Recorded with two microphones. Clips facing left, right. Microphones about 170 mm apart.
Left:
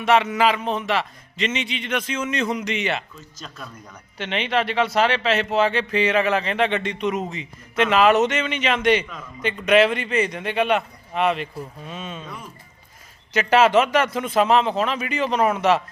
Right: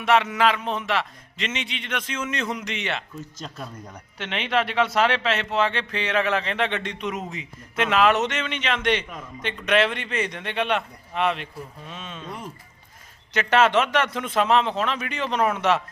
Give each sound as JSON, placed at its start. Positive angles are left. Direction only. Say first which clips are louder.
{"t": 0.0, "sound": "speech", "louder": "left 2 dB", "side_deg": 0}
{"t": 4.2, "sound": "speech", "louder": "left 2 dB", "side_deg": 0}
{"t": 13.3, "sound": "speech", "louder": "left 3 dB", "side_deg": 5}